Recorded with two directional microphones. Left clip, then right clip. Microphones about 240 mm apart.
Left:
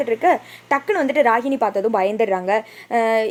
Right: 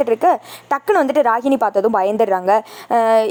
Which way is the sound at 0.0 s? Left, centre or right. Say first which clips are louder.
Right 3 dB; right.